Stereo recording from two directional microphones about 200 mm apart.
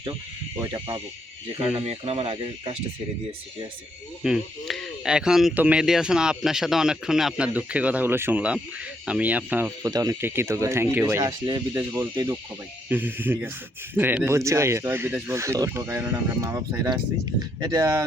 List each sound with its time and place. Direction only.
0.6 s speech: 15° right (ahead or behind)
1.5 s speech: 30° right (ahead or behind)
4.2 s speech: centre (ahead or behind); by 18.0 s 15° right (ahead or behind)